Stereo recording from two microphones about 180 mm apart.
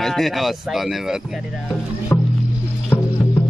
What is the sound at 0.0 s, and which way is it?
Speech, centre (ahead or behind).